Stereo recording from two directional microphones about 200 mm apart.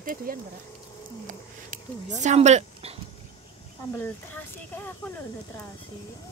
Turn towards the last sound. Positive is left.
turn(degrees=10)  # may be behind; listen again after turning